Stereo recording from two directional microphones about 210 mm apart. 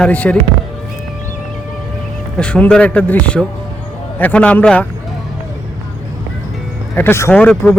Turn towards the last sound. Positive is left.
turn(degrees=5)  # may be behind; listen again after turning